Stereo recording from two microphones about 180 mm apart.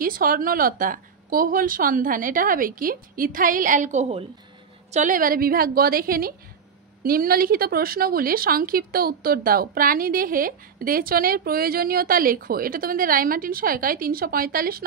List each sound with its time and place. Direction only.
0.0 s speech: 50° right (ahead or behind)